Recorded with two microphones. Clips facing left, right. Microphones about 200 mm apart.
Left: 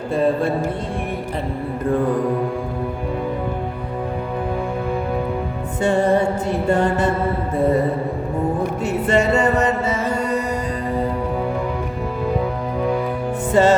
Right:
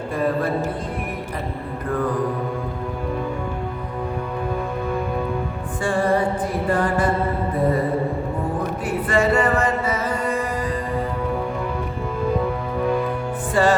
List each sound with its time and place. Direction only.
5.8 s music: 25° left (ahead or behind)
8.8 s music: 25° left (ahead or behind)
13.5 s music: 25° left (ahead or behind)